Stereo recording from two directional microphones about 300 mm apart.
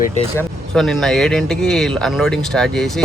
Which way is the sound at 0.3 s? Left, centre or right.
Centre.